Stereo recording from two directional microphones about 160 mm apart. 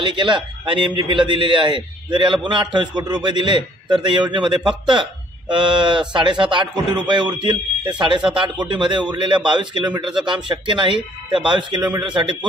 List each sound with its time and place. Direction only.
0.0 s a man's voice: 30° right (ahead or behind)